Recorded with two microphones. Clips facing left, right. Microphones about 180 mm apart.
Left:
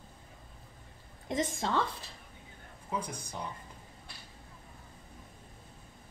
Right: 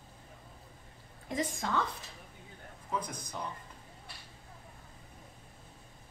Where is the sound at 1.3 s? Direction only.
25° left (ahead or behind).